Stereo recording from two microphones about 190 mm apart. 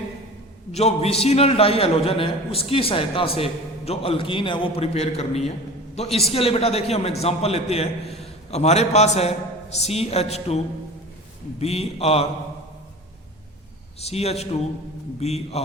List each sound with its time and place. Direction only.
0.7 s a man's voice: 35° left (ahead or behind)
11.6 s a man's voice: 30° left (ahead or behind)
14.0 s a man's voice: 35° left (ahead or behind)